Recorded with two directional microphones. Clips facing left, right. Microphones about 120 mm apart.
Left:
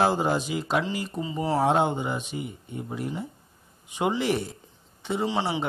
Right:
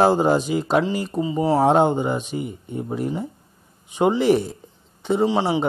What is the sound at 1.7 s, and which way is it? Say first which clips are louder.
Speech: right 6 dB; 35° right (ahead or behind).